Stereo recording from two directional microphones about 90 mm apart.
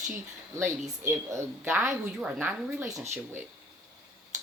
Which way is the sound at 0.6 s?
30° right (ahead or behind).